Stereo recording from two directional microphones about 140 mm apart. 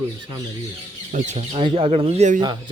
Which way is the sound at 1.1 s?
55° right (ahead or behind).